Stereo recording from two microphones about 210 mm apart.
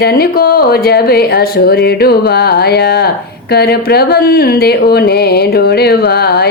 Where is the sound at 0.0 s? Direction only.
45° left (ahead or behind).